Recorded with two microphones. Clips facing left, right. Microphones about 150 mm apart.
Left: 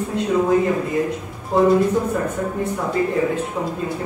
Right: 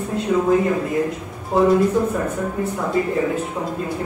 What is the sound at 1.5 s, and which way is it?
Speech, 5° right (ahead or behind).